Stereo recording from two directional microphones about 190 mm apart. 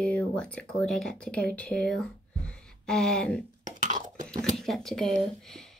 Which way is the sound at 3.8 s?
40° right (ahead or behind).